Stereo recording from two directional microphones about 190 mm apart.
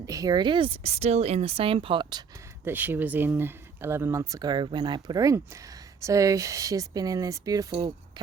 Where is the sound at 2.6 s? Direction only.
10° right (ahead or behind).